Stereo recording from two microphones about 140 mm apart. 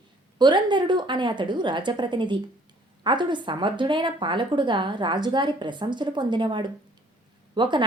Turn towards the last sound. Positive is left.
turn(degrees=-35)  # may be behind; listen again after turning